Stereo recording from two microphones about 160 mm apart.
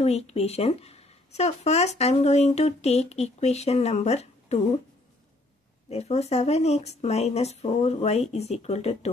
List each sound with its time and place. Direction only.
0.0 s speech: 40° left (ahead or behind)
5.9 s speech: 40° left (ahead or behind)